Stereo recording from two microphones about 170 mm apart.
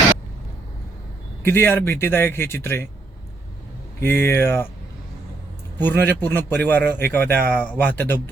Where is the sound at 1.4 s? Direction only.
15° left (ahead or behind).